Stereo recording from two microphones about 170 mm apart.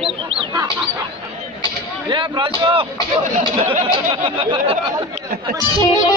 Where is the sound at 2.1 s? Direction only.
30° right (ahead or behind).